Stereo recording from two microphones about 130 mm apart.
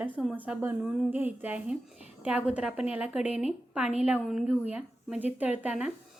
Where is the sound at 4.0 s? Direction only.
10° right (ahead or behind).